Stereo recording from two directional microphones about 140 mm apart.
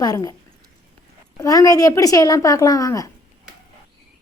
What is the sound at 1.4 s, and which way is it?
A woman's voice, 25° left (ahead or behind).